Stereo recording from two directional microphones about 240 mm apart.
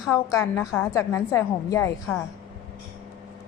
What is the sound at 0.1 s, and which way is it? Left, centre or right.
A woman's voice, centre.